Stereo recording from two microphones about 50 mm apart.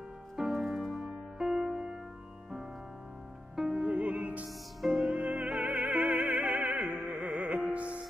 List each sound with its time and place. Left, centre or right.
0.4 s music: centre
3.5 s music: centre
3.8 s music: right
7.1 s carnatic music: right
7.4 s music: right